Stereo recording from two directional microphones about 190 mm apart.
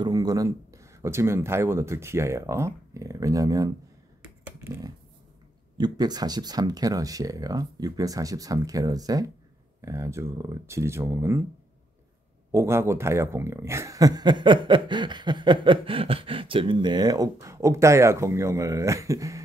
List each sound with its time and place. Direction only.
0.0 s speech: 20° right (ahead or behind)
4.2 s finger snapping: 15° right (ahead or behind)
5.8 s speech: 20° right (ahead or behind)
12.5 s speech: 15° right (ahead or behind)